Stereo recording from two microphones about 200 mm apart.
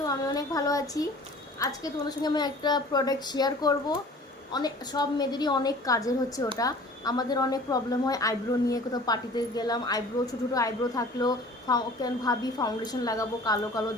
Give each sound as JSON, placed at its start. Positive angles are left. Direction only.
{"t": 0.0, "sound": "a woman's voice", "side_deg": 20}